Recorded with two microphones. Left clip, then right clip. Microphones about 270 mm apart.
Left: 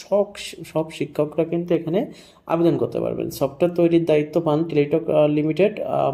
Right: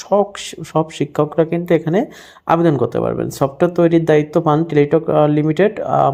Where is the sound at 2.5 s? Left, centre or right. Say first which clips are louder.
Right 5 dB; right.